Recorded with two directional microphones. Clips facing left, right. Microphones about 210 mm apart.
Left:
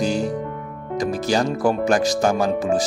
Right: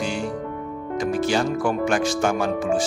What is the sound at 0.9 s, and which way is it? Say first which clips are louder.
Speech: left 1 dB; 40° left (ahead or behind).